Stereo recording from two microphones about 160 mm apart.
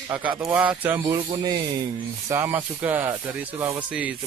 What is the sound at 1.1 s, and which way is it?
Speech, 25° right (ahead or behind).